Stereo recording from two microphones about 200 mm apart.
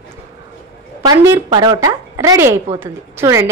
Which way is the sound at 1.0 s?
15° right (ahead or behind).